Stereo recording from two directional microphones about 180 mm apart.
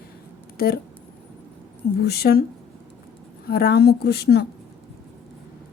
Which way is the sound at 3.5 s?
60° left (ahead or behind).